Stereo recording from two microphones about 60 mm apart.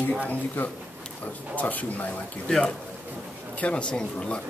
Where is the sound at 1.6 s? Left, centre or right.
Left.